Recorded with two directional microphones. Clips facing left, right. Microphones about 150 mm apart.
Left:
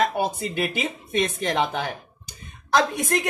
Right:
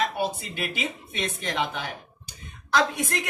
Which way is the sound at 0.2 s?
40° left (ahead or behind).